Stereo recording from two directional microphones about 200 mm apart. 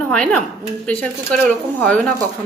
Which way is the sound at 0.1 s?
5° left (ahead or behind).